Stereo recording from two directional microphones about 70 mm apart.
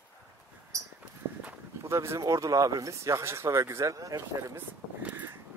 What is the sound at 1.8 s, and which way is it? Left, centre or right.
Speech, right.